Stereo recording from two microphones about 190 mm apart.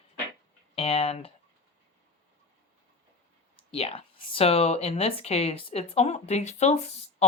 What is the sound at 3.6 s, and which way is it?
Speech, 30° left (ahead or behind).